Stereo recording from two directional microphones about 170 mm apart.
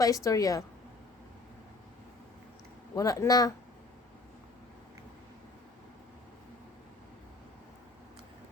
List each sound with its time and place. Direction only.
0.0 s a woman's voice: 20° left (ahead or behind)
2.9 s a woman's voice: 20° left (ahead or behind)